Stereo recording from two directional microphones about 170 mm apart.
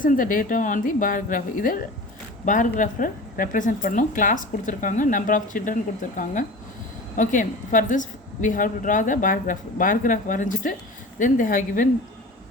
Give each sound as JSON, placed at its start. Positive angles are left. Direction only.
{"t": 0.0, "sound": "a woman's voice", "side_deg": 50}